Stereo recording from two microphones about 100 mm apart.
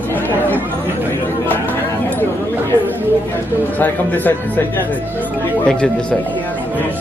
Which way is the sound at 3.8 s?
15° left (ahead or behind).